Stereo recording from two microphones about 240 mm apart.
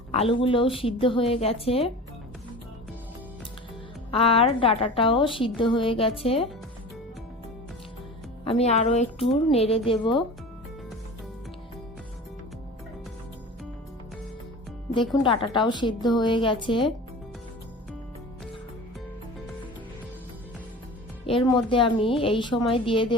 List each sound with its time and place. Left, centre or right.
0.1 s a woman's voice: left
4.1 s a woman's voice: left
8.4 s a woman's voice: left
15.1 s a woman's voice: centre
21.2 s a woman's voice: left